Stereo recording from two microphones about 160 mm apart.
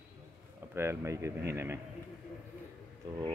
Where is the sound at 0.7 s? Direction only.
15° right (ahead or behind).